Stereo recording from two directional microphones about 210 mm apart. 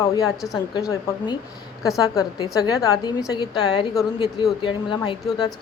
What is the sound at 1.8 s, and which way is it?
A woman's voice, 15° left (ahead or behind).